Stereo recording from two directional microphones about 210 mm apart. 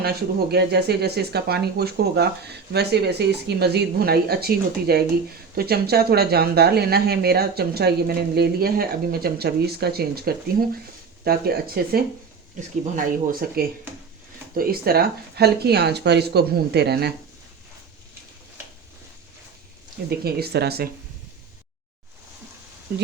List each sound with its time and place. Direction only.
0.0 s speech: 50° right (ahead or behind)
20.1 s speech: 50° right (ahead or behind)